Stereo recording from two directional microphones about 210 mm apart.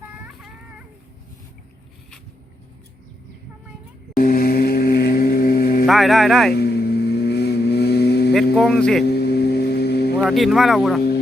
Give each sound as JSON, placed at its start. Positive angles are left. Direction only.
{"t": 4.2, "sound": "mantra", "side_deg": 40}
{"t": 5.8, "sound": "speech", "side_deg": 0}
{"t": 6.5, "sound": "vehicle", "side_deg": 50}
{"t": 8.5, "sound": "speech", "side_deg": 5}
{"t": 9.0, "sound": "singing bowl", "side_deg": 50}
{"t": 10.2, "sound": "speech", "side_deg": 0}